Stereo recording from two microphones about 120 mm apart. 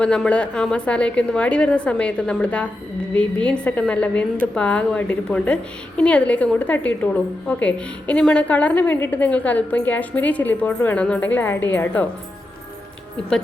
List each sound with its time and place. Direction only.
0.0 s a woman's voice: 10° left (ahead or behind)